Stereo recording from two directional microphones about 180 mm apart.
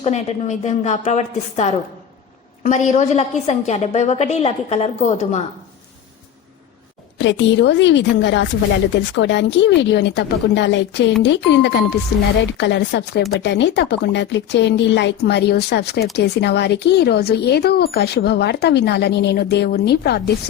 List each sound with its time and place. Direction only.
0.0 s a woman's voice: 35° left (ahead or behind)
7.2 s a woman's voice: 90° left; by 20.3 s 65° left (ahead or behind)